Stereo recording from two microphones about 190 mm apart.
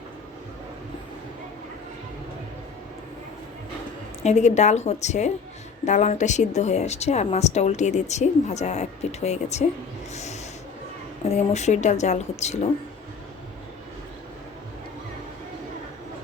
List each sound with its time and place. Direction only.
4.2 s a woman's voice: 35° left (ahead or behind)
10.1 s snort: 35° left (ahead or behind)
11.3 s a woman's voice: 35° left (ahead or behind)